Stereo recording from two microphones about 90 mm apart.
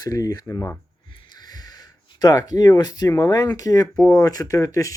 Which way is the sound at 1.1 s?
70° left (ahead or behind).